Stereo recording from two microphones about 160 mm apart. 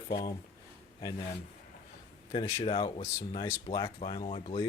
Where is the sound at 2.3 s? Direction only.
25° left (ahead or behind).